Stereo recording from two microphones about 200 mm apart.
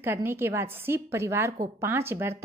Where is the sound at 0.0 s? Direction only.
10° right (ahead or behind).